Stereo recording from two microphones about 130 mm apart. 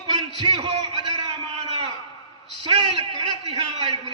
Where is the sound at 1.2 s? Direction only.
50° right (ahead or behind).